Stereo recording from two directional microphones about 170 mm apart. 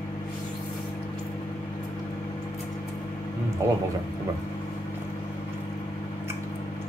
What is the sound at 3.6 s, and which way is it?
Speech, 15° right (ahead or behind).